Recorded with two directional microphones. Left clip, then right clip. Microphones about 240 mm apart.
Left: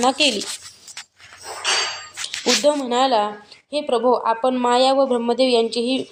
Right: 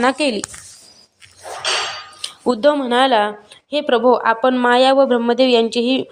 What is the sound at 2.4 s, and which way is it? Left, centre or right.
A woman's voice, centre.